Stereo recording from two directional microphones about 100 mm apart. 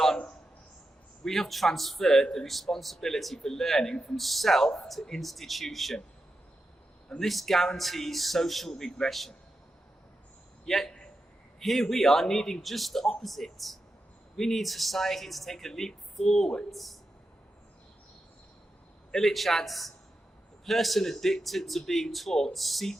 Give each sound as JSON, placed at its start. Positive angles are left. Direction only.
{"t": 0.0, "sound": "a sound", "side_deg": 10}
{"t": 1.2, "sound": "speech", "side_deg": 5}
{"t": 7.2, "sound": "speech", "side_deg": 0}
{"t": 10.7, "sound": "speech", "side_deg": 5}
{"t": 19.1, "sound": "speech", "side_deg": 0}